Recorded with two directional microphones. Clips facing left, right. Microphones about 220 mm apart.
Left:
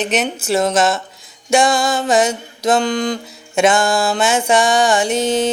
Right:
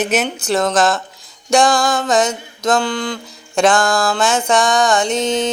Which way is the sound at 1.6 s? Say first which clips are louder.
Right 1 dB; 25° left (ahead or behind).